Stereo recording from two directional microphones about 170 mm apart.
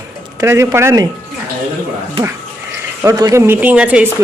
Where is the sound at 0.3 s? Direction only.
15° right (ahead or behind).